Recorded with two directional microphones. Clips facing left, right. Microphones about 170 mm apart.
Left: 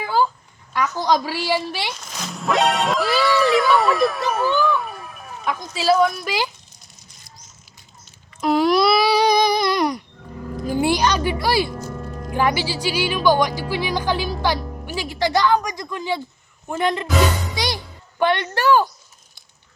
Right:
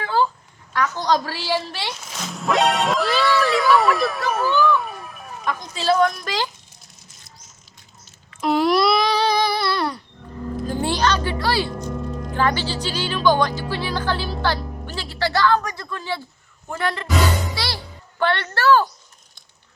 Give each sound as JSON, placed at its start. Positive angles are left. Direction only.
{"t": 0.0, "sound": "a sound", "side_deg": 10}
{"t": 0.7, "sound": "a woman's voice", "side_deg": 10}
{"t": 1.9, "sound": "a woman's voice", "side_deg": -5}
{"t": 8.4, "sound": "babbling", "side_deg": 0}
{"t": 10.7, "sound": "a woman's voice", "side_deg": 10}
{"t": 17.5, "sound": "music", "side_deg": 15}
{"t": 18.2, "sound": "a woman's voice", "side_deg": 15}